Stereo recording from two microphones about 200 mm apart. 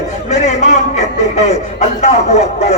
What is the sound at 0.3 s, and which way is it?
A man's voice, 35° left (ahead or behind).